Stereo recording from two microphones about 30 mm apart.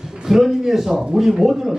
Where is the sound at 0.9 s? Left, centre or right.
Right.